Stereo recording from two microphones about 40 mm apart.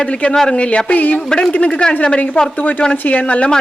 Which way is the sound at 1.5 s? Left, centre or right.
Left.